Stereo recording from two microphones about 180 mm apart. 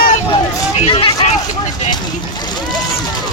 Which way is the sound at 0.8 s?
30° left (ahead or behind).